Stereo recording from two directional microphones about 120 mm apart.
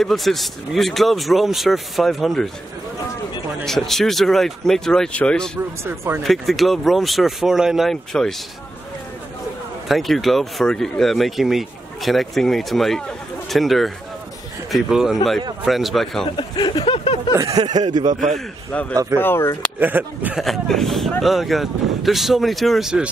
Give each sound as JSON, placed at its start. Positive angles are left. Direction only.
{"t": 0.0, "sound": "speech", "side_deg": 0}
{"t": 3.6, "sound": "speech", "side_deg": 5}
{"t": 5.9, "sound": "speech", "side_deg": -20}
{"t": 6.2, "sound": "speech", "side_deg": 0}
{"t": 9.8, "sound": "speech", "side_deg": 0}
{"t": 16.3, "sound": "a sound", "side_deg": 40}
{"t": 17.6, "sound": "speech", "side_deg": -35}
{"t": 18.3, "sound": "a man's voice", "side_deg": 10}
{"t": 19.8, "sound": "speech", "side_deg": -15}
{"t": 20.3, "sound": "speech", "side_deg": 0}